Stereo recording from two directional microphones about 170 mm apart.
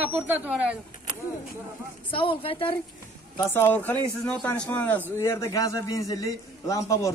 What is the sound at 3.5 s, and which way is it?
A man's voice, 10° left (ahead or behind).